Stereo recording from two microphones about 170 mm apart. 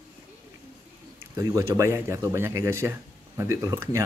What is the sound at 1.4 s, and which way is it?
Speech, 20° right (ahead or behind).